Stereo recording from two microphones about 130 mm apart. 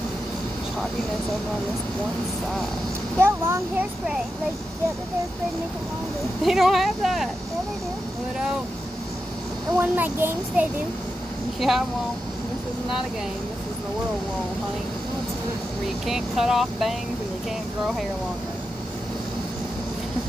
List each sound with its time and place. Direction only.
3.2 s a child's voice: 20° right (ahead or behind)
6.4 s speech: centre (ahead or behind)
9.8 s speech: 15° right (ahead or behind)
11.6 s speech: centre (ahead or behind)
16.1 s speech: centre (ahead or behind)